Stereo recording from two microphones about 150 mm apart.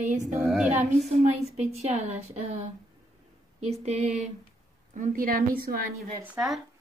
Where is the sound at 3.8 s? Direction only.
45° right (ahead or behind).